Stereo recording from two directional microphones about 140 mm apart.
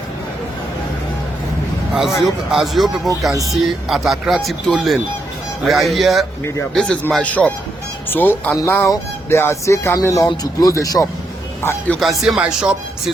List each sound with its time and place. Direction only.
2.0 s speech: centre (ahead or behind); by 11.1 s 25° left (ahead or behind)
11.9 s speech: centre (ahead or behind)